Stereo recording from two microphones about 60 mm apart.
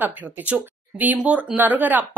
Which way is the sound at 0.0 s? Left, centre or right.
Right.